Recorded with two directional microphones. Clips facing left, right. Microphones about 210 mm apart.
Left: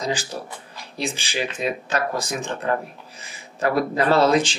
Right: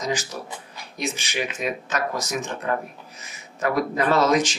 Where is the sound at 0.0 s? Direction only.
30° left (ahead or behind).